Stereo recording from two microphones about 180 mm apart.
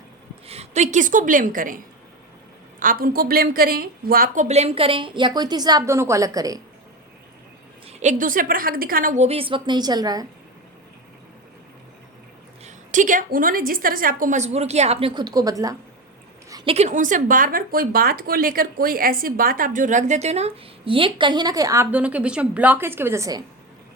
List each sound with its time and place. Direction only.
0.4 s speech: 35° right (ahead or behind)
2.8 s a woman's voice: 55° right (ahead or behind)
4.4 s a woman's voice: 35° right (ahead or behind); by 6.6 s 20° right (ahead or behind)
7.9 s a woman's voice: 40° right (ahead or behind)
9.2 s a woman's voice: 30° right (ahead or behind)
12.6 s a woman's voice: 45° right (ahead or behind); by 15.7 s 20° right (ahead or behind)
16.5 s a sound: 20° right (ahead or behind)
16.7 s a woman's voice: 40° right (ahead or behind); by 21.8 s 20° right (ahead or behind)
21.9 s a woman's voice: 5° right (ahead or behind)